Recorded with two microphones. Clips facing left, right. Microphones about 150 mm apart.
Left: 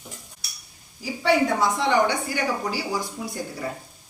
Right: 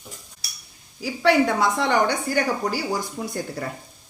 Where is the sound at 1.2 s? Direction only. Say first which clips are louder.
Right 2 dB; 80° right.